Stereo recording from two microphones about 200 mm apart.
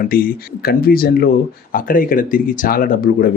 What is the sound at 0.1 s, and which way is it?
Speech, 45° left (ahead or behind).